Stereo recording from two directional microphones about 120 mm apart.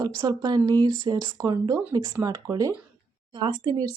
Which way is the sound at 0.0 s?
35° right (ahead or behind).